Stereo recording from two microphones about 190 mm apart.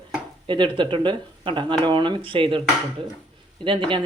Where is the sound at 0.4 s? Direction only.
25° right (ahead or behind).